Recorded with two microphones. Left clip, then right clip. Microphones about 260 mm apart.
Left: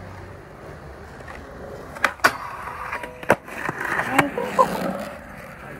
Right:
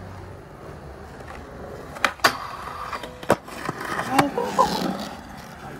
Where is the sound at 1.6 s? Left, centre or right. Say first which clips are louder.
Left 1 dB; centre.